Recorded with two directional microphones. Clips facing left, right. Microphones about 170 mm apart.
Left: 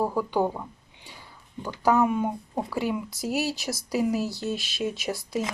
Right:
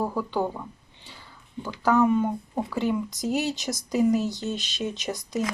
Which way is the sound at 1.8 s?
10° left (ahead or behind).